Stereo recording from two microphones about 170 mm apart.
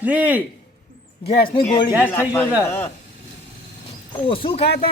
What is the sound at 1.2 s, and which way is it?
Speech, 35° left (ahead or behind).